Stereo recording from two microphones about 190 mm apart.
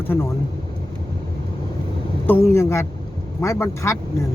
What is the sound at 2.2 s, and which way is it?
Speech, 10° left (ahead or behind).